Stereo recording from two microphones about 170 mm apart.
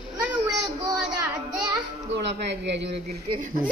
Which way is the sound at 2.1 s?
90° right.